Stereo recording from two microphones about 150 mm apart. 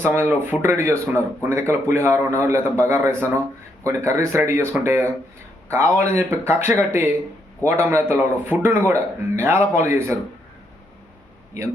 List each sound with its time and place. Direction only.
0.0 s speech: 15° right (ahead or behind)